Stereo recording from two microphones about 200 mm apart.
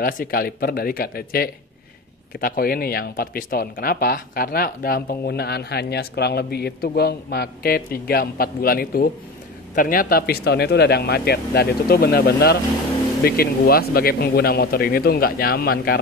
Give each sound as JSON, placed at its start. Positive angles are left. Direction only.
{"t": 0.0, "sound": "speech", "side_deg": 45}